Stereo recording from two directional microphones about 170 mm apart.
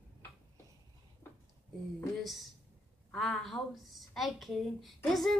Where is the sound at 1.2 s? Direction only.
15° left (ahead or behind).